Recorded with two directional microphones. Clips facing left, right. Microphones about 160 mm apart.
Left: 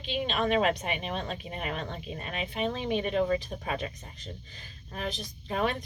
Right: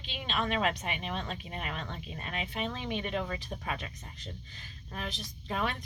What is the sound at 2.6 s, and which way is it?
Speech, 35° left (ahead or behind).